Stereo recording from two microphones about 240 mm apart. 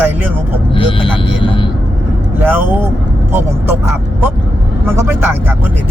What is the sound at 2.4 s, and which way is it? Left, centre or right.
Speech, centre.